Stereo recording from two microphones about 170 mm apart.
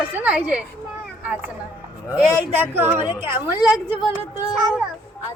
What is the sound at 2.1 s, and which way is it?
Speech, 10° right (ahead or behind).